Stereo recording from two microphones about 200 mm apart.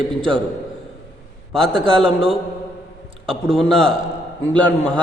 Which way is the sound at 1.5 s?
Centre (ahead or behind).